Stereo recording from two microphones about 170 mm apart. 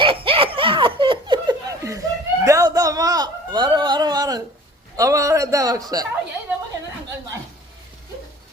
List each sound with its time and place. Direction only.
0.0 s laughter: 30° right (ahead or behind)
4.9 s a man's voice: 20° right (ahead or behind)